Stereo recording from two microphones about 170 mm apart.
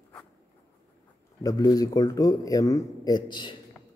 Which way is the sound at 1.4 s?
20° left (ahead or behind).